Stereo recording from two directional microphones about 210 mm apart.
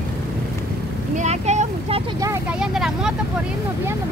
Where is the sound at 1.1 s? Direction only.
35° right (ahead or behind).